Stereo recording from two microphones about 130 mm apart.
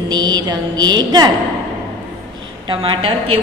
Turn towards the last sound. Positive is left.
turn(degrees=-45)  # may be behind; listen again after turning